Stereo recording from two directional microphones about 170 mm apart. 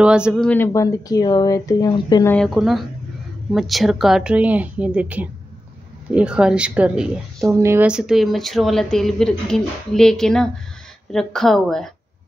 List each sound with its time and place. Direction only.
0.0 s speech: 5° right (ahead or behind)
0.5 s speech: 15° left (ahead or behind)
2.3 s speech: centre (ahead or behind)
7.5 s speech: 15° right (ahead or behind); by 11.9 s centre (ahead or behind)